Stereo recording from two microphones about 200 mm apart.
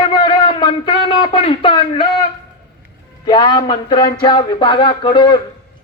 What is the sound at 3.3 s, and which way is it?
Speech, 20° left (ahead or behind).